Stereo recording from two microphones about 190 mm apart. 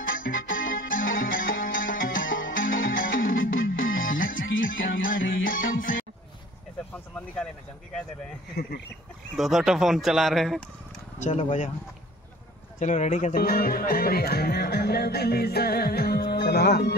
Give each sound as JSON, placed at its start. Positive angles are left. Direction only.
{"t": 0.2, "sound": "music", "side_deg": 45}
{"t": 4.6, "sound": "music", "side_deg": 90}
{"t": 5.0, "sound": "music", "side_deg": 45}
{"t": 9.4, "sound": "speech", "side_deg": 0}
{"t": 11.1, "sound": "speech", "side_deg": 40}
{"t": 12.7, "sound": "speech", "side_deg": 40}